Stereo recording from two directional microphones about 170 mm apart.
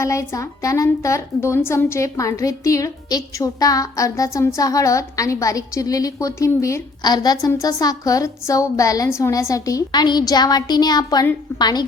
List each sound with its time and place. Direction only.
0.0 s a woman's voice: 15° left (ahead or behind)